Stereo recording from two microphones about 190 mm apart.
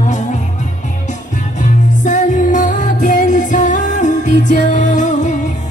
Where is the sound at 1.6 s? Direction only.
40° left (ahead or behind).